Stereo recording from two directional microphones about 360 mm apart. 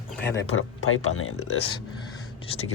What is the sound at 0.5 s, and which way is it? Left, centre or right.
Speech, left.